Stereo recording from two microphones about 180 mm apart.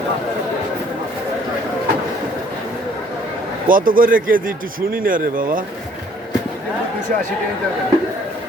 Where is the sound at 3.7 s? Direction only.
50° right (ahead or behind).